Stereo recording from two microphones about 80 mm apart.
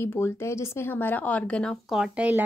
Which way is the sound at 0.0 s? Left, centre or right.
Left.